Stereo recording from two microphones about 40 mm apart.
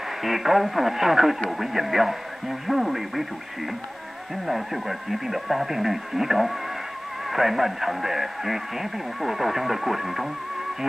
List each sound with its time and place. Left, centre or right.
0.2 s speech: centre
4.5 s speech: centre